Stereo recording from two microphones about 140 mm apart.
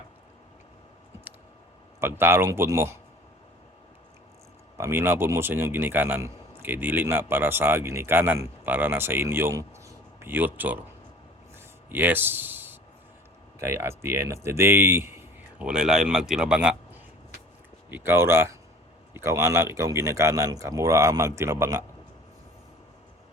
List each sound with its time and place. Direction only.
2.0 s a man's voice: 15° right (ahead or behind)
4.8 s a man's voice: 15° right (ahead or behind)
11.9 s speech: 15° right (ahead or behind)
15.6 s a man's voice: 5° right (ahead or behind)